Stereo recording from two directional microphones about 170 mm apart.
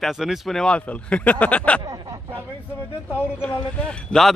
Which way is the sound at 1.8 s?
20° right (ahead or behind).